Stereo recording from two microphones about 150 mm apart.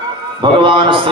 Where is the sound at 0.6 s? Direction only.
35° right (ahead or behind).